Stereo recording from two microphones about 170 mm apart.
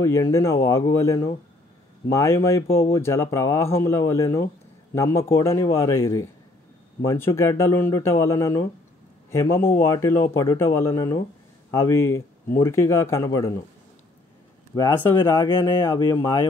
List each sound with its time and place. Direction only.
0.0 s a man's voice: 15° left (ahead or behind)
14.8 s a man's voice: 15° left (ahead or behind)